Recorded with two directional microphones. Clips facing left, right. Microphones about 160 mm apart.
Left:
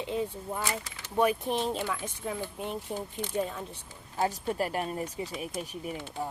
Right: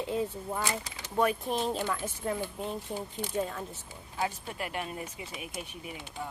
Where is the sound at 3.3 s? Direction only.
Centre (ahead or behind).